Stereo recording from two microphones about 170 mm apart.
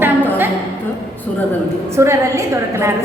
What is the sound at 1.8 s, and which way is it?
A woman's voice, 15° right (ahead or behind).